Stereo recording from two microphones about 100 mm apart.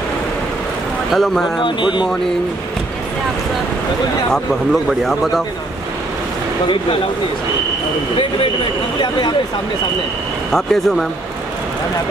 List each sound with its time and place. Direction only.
1.1 s speech: 5° left (ahead or behind)
1.6 s speech: 50° left (ahead or behind)
4.8 s speech: centre (ahead or behind)
10.5 s speech: 5° left (ahead or behind)